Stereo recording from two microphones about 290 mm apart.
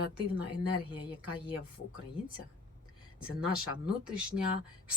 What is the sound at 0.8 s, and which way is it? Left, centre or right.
Speech, centre.